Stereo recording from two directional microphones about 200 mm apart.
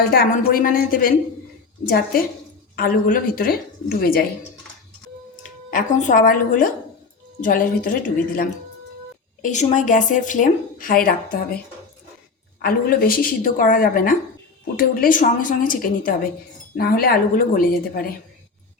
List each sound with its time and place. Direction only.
0.0 s a woman's voice: 50° left (ahead or behind)
5.7 s a woman's voice: 40° left (ahead or behind)
12.6 s a woman's voice: 50° left (ahead or behind)